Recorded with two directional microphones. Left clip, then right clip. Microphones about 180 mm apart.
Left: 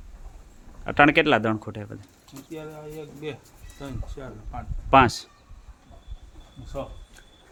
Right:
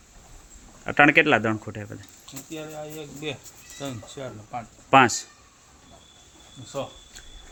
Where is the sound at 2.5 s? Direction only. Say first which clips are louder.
Right 1 dB; 40° right (ahead or behind).